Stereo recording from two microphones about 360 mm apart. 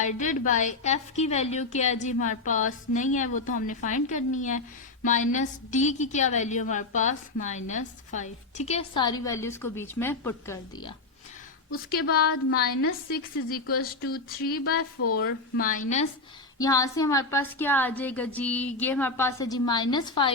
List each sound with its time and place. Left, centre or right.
0.0 s a woman's voice: centre
12.5 s a woman's voice: left
16.6 s a woman's voice: centre